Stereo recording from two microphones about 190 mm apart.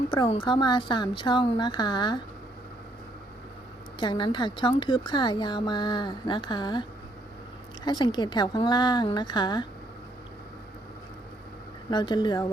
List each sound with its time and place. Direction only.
0.1 s speech: 30° left (ahead or behind)
4.0 s speech: 25° left (ahead or behind)
7.9 s speech: 25° left (ahead or behind)
11.9 s speech: 25° left (ahead or behind)